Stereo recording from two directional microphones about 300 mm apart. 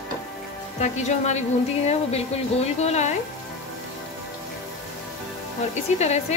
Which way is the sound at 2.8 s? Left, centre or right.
Left.